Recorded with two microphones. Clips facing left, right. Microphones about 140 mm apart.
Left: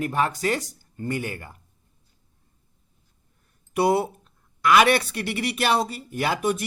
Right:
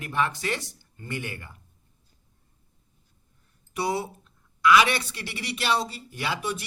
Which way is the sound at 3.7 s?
55° left (ahead or behind).